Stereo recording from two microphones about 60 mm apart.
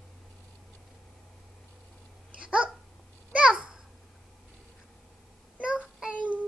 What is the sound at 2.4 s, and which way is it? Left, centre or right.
Babbling, centre.